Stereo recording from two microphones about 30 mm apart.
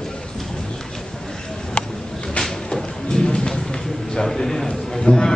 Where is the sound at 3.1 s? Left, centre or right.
Left.